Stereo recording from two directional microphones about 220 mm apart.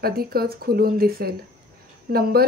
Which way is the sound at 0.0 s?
45° right (ahead or behind).